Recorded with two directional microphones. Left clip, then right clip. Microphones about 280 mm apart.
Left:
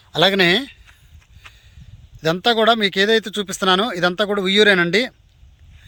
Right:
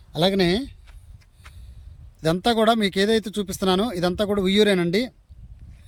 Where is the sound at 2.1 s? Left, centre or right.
Centre.